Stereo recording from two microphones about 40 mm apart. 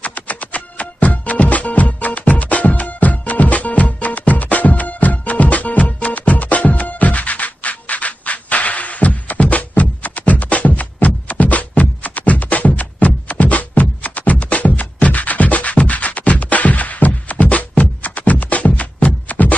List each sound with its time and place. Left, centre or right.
0.0 s music: left